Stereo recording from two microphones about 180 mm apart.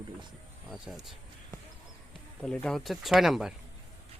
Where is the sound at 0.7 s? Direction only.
Centre (ahead or behind).